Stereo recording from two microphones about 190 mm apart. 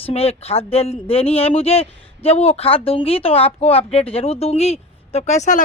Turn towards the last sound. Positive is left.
turn(degrees=40)  # may be behind; listen again after turning